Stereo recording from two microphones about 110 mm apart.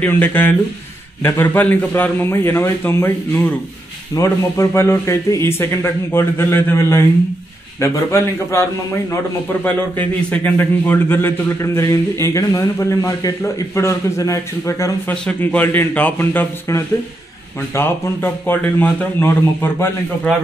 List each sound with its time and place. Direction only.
0.0 s a man's voice: 15° left (ahead or behind)
9.9 s a man's voice: 15° left (ahead or behind)
15.2 s a man's voice: 15° left (ahead or behind)